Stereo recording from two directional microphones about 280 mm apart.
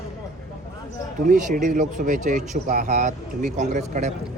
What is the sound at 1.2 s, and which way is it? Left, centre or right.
Speech, right.